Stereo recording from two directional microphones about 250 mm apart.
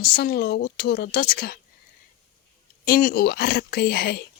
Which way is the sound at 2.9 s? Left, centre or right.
Left.